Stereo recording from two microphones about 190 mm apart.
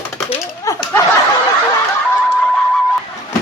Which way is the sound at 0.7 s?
15° left (ahead or behind).